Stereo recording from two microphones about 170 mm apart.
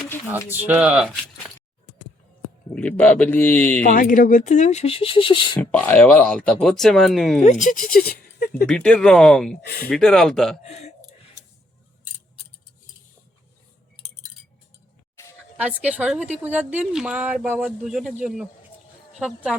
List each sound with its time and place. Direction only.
0.3 s speech: 10° right (ahead or behind)
2.7 s speech: 10° left (ahead or behind)
3.8 s speech: 55° left (ahead or behind); by 5.5 s 30° left (ahead or behind)
5.5 s speech: 10° left (ahead or behind)
7.4 s speech: 45° left (ahead or behind); by 8.6 s 60° left (ahead or behind)
8.6 s speech: 5° left (ahead or behind)
9.6 s speech: 70° left (ahead or behind)
9.9 s speech: 5° left (ahead or behind)
10.6 s speech: 40° left (ahead or behind)
15.8 s speech: 10° right (ahead or behind)